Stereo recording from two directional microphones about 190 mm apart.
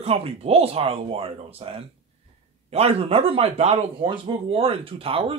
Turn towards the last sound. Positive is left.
turn(degrees=-30)  # may be behind; listen again after turning